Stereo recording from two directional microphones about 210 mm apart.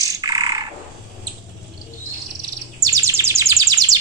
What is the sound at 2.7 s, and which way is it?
Bird, 15° right (ahead or behind).